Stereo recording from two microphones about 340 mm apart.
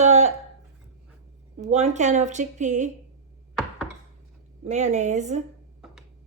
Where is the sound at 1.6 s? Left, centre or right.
Centre.